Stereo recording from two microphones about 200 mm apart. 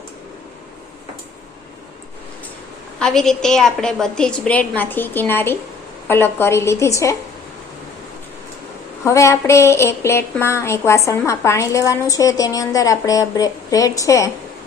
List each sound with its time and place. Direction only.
3.0 s a woman's voice: centre (ahead or behind)
9.0 s a woman's voice: 15° left (ahead or behind)